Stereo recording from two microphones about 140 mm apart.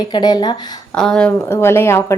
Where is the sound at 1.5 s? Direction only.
20° left (ahead or behind).